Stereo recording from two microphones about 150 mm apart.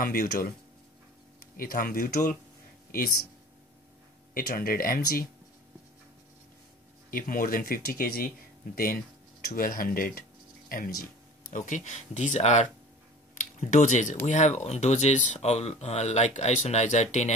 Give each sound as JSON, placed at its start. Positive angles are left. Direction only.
{"t": 0.0, "sound": "speech", "side_deg": 70}
{"t": 1.6, "sound": "speech", "side_deg": 70}
{"t": 4.3, "sound": "speech", "side_deg": 75}
{"t": 7.1, "sound": "speech", "side_deg": 65}
{"t": 11.5, "sound": "speech", "side_deg": 55}